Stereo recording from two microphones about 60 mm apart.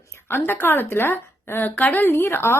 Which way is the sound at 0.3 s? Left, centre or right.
Left.